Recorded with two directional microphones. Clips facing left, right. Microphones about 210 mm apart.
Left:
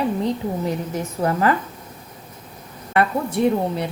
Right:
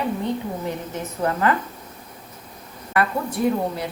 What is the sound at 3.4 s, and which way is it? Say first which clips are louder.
Speech: left 3 dB; 90° left.